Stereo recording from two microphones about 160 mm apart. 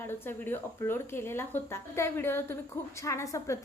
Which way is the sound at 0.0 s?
15° left (ahead or behind).